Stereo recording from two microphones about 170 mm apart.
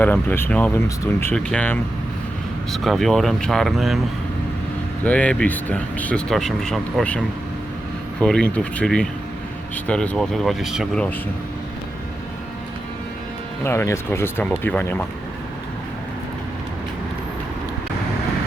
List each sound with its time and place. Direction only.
0.0 s speech: 10° left (ahead or behind)
1.4 s speech: 5° left (ahead or behind)
5.0 s speech: 10° left (ahead or behind)
8.2 s speech: 5° left (ahead or behind)
13.7 s speech: 15° left (ahead or behind)